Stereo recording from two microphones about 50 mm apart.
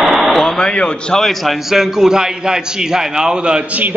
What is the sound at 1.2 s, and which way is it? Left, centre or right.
A man's voice, centre.